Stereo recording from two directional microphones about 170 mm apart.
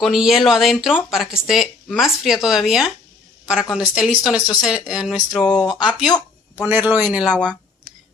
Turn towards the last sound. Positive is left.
turn(degrees=5)  # may be behind; listen again after turning